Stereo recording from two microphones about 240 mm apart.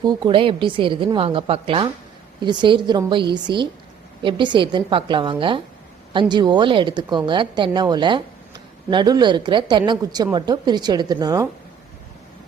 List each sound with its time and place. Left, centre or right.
0.0 s a woman's voice: centre